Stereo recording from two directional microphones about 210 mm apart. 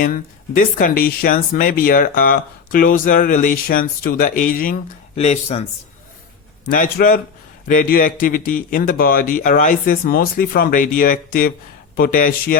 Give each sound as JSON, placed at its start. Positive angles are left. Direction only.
{"t": 0.0, "sound": "speech", "side_deg": 40}
{"t": 5.1, "sound": "speech", "side_deg": 30}
{"t": 6.7, "sound": "a man's voice", "side_deg": 40}